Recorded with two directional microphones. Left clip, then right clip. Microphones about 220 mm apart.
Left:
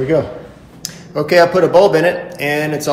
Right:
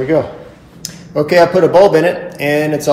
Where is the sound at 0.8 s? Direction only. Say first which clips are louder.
Right 3 dB; centre (ahead or behind).